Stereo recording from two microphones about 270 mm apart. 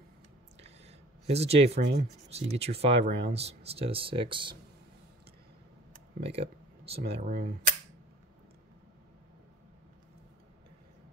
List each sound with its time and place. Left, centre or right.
0.6 s a sound: right
2.2 s speech: right
6.2 s speech: right